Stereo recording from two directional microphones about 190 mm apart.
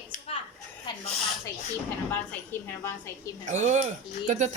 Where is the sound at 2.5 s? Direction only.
10° left (ahead or behind).